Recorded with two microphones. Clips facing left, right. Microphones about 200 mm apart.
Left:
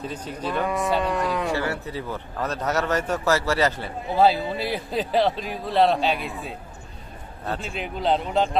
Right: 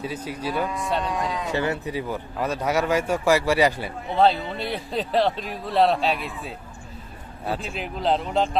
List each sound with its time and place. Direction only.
0.0 s a man's voice: 10° right (ahead or behind)
1.0 s speech: 65° left (ahead or behind)
1.5 s a man's voice: 20° right (ahead or behind)
4.1 s a man's voice: 5° left (ahead or behind)